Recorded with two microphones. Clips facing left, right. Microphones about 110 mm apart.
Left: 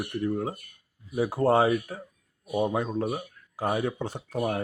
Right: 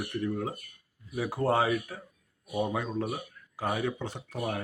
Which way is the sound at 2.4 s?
20° left (ahead or behind).